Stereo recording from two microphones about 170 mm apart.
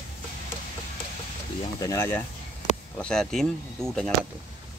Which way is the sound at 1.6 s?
20° left (ahead or behind).